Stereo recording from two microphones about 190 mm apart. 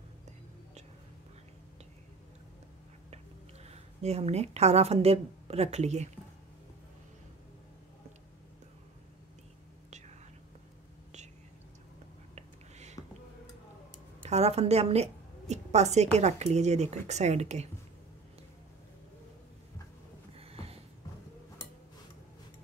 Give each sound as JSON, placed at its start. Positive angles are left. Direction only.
{"t": 3.6, "sound": "a woman's voice", "side_deg": -35}
{"t": 12.4, "sound": "whispering", "side_deg": -35}
{"t": 14.3, "sound": "a woman's voice", "side_deg": -35}
{"t": 20.3, "sound": "a sound", "side_deg": -30}